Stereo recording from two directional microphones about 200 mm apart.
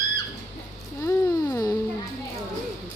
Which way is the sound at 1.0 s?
15° left (ahead or behind).